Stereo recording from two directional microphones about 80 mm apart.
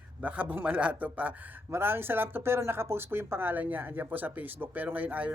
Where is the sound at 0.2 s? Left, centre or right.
Centre.